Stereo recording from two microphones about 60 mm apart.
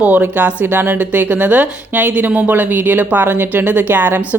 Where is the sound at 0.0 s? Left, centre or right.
Right.